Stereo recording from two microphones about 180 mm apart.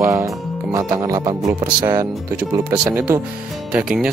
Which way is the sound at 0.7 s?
20° right (ahead or behind).